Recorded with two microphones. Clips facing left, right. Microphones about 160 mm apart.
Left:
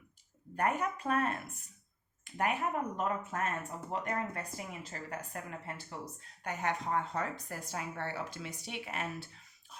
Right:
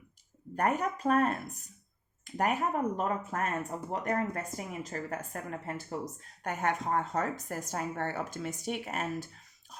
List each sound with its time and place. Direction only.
0.5 s a woman's voice: 40° right (ahead or behind)